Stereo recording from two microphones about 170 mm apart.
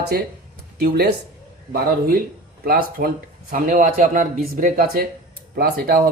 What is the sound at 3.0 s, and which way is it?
Speech, 55° right (ahead or behind).